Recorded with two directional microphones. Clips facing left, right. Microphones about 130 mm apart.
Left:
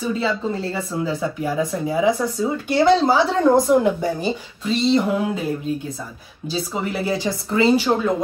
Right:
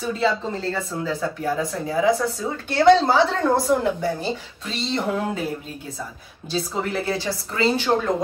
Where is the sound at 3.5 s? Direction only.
15° left (ahead or behind).